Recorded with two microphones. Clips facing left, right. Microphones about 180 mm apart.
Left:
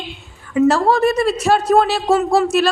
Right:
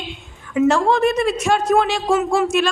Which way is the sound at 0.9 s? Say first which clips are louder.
Left 2 dB; 15° right (ahead or behind).